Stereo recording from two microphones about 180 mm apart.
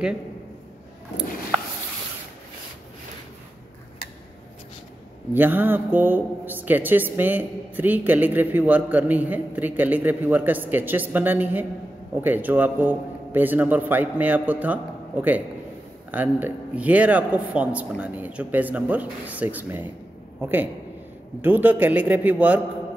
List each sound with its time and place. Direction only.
5.3 s a man's voice: 10° right (ahead or behind)